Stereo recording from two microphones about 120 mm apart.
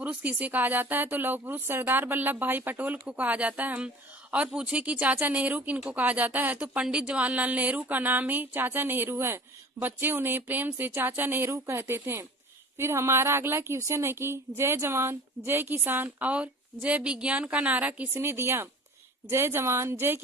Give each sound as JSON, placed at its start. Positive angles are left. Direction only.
{"t": 0.0, "sound": "a woman's voice", "side_deg": -10}